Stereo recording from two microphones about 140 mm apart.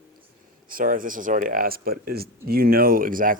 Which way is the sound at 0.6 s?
80° right.